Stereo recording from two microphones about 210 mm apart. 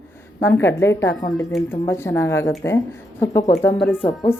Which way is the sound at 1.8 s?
10° left (ahead or behind).